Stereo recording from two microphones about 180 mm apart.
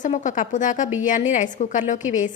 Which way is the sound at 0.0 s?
45° left (ahead or behind).